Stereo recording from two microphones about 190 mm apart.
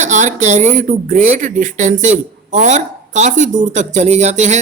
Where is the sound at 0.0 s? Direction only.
40° right (ahead or behind).